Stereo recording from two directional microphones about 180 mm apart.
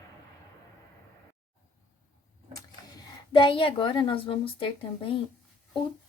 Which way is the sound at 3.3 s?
25° left (ahead or behind).